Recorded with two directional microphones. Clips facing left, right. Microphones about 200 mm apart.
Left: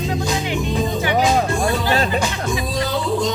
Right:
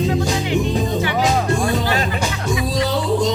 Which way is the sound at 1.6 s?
35° left (ahead or behind).